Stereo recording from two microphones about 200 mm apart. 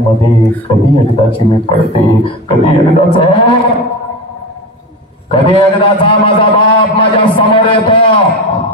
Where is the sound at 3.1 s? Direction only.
25° left (ahead or behind).